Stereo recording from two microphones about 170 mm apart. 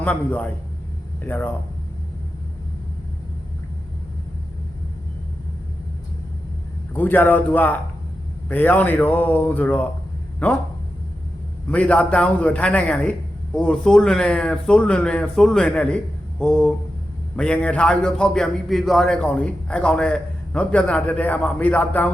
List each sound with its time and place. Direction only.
0.0 s a man's voice: 10° left (ahead or behind)
6.9 s a man's voice: 10° left (ahead or behind)
11.7 s a man's voice: 10° left (ahead or behind)